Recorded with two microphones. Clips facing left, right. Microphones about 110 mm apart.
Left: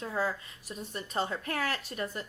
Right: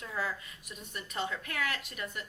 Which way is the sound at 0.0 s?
30° left (ahead or behind).